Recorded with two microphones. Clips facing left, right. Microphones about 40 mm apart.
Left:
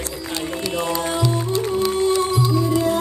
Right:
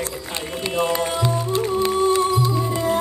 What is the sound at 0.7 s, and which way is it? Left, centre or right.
Music, right.